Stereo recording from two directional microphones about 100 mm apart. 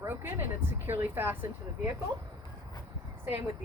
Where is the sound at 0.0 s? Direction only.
25° right (ahead or behind).